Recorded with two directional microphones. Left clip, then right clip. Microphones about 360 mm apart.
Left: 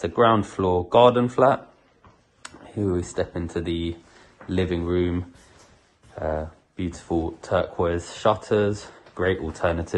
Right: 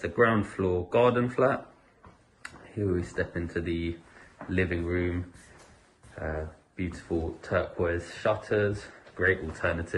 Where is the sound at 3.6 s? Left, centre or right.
Left.